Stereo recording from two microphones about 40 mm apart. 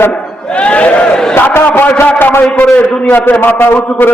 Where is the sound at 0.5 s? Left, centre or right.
Left.